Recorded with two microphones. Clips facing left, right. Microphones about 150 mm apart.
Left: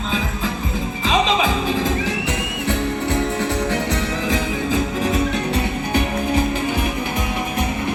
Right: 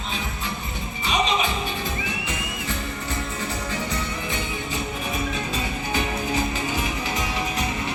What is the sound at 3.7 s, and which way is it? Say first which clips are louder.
Music: left 7 dB; 85° left.